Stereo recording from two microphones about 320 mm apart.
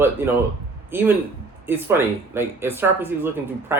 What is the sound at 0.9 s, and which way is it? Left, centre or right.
A man's voice, centre.